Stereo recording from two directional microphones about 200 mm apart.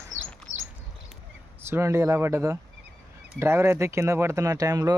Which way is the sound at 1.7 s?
15° right (ahead or behind).